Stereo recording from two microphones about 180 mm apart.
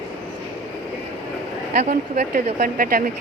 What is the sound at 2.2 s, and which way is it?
Speech, 45° right (ahead or behind).